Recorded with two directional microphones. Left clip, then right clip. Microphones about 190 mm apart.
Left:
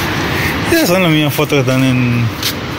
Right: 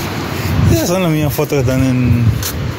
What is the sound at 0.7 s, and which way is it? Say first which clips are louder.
Speech: left 4 dB; 15° right (ahead or behind).